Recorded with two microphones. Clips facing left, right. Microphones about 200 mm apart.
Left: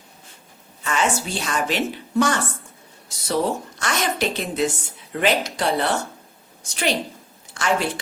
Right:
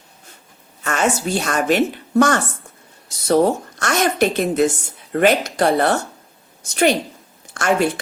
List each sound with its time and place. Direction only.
0.9 s a woman's voice: 45° right (ahead or behind)